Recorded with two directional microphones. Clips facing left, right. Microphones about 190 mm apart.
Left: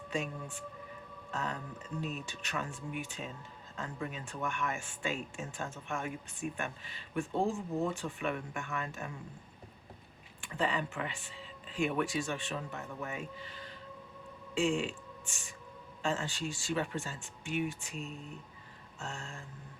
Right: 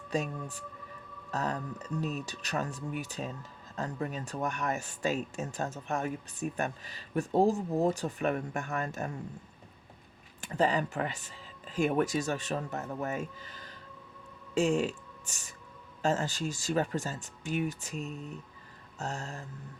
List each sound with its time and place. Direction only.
0.1 s speech: 40° right (ahead or behind)
10.4 s speech: 40° right (ahead or behind)